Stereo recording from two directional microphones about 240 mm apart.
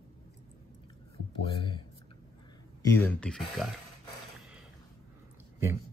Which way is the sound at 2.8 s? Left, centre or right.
Centre.